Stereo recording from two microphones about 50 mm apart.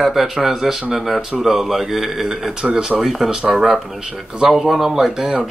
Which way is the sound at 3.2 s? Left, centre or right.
Centre.